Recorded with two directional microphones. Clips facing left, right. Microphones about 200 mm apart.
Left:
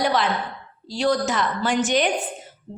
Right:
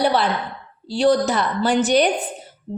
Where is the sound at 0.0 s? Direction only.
35° right (ahead or behind).